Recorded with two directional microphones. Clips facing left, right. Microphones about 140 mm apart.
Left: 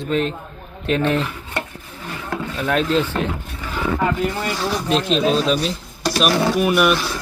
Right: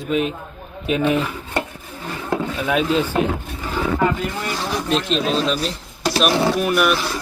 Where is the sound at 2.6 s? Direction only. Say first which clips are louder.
Left 2 dB; 5° right (ahead or behind).